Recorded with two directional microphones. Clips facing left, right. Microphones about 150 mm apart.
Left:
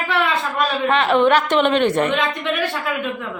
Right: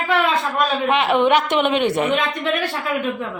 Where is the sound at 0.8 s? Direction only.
15° right (ahead or behind).